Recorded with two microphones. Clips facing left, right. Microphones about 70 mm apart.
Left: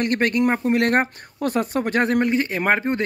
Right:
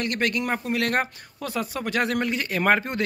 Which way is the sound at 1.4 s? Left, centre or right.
Left.